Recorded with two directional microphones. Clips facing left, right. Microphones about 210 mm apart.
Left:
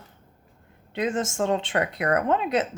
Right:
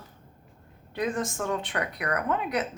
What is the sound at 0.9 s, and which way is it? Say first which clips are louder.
Speech: left 3 dB; 25° left (ahead or behind).